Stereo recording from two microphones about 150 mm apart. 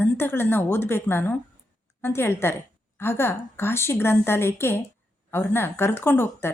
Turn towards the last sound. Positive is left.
turn(degrees=15)  # may be behind; listen again after turning